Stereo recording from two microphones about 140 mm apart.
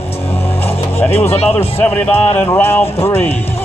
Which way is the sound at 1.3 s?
45° left (ahead or behind).